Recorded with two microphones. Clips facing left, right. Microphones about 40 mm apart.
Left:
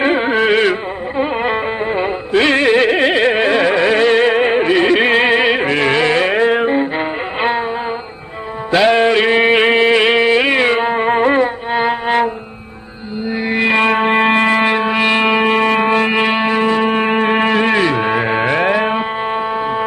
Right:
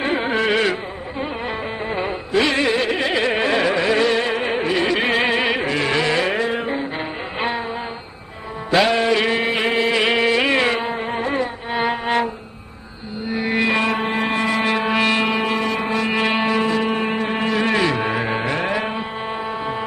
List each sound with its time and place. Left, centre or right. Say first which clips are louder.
0.2 s music: left 6 dB; left
1.9 s music: left 3 dB; centre
2.3 s carnatic music: left 6 dB; left
3.3 s music: left 5 dB; left
8.9 s a sound: left 6 dB; left
10.2 s music: left 5 dB; centre
10.8 s music: left 9 dB; left
11.7 s music: left 3 dB; centre
13.3 s music: left 3 dB; centre
13.7 s music: left 7 dB; left
16.2 s music: left 4 dB; left